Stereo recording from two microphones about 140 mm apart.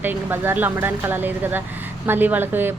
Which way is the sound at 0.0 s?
15° right (ahead or behind).